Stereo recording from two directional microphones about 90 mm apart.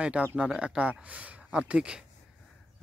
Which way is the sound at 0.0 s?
10° right (ahead or behind).